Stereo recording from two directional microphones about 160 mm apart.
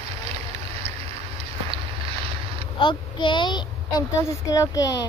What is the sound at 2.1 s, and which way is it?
Boat, 35° right (ahead or behind).